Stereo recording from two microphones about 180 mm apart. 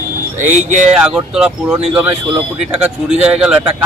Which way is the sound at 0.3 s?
45° right (ahead or behind).